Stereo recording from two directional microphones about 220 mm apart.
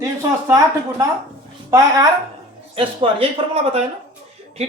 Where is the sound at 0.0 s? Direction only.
15° right (ahead or behind).